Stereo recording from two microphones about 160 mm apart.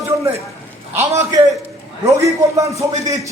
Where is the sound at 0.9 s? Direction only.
15° right (ahead or behind).